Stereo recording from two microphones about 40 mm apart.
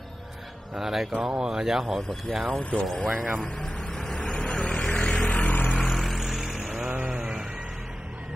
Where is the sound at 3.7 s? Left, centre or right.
Centre.